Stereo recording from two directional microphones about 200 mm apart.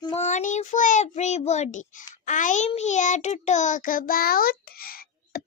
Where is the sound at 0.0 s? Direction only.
35° left (ahead or behind).